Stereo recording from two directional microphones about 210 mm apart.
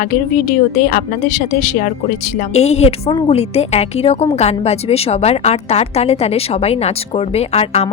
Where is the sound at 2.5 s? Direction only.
30° left (ahead or behind).